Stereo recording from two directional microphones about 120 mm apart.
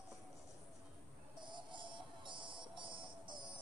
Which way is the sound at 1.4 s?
40° right (ahead or behind).